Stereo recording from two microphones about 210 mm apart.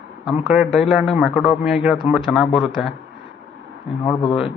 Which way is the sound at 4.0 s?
20° left (ahead or behind).